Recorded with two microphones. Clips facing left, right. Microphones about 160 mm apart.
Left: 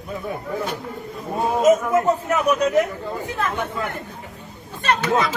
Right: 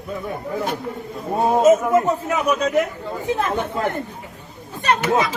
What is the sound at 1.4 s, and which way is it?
Speech, 30° right (ahead or behind).